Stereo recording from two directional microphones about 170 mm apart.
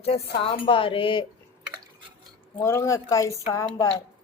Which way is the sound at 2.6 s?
15° left (ahead or behind).